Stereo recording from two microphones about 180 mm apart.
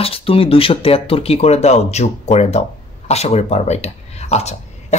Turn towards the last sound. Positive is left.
turn(degrees=40)  # may be behind; listen again after turning